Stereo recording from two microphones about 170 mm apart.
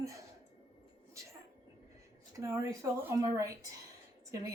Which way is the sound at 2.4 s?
15° right (ahead or behind).